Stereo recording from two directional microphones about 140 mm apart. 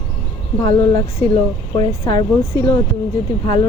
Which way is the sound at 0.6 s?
25° left (ahead or behind).